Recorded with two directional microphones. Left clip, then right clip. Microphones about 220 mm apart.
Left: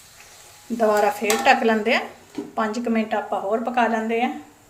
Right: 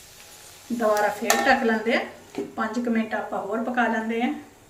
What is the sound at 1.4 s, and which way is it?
A woman's voice, 45° left (ahead or behind).